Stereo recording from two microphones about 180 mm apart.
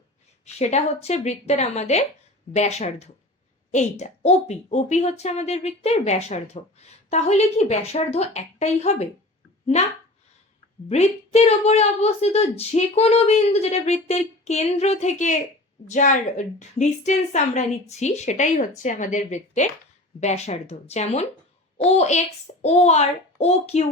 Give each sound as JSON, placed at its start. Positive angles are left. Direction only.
{"t": 0.4, "sound": "a woman's voice", "side_deg": 40}
{"t": 10.8, "sound": "a woman's voice", "side_deg": 35}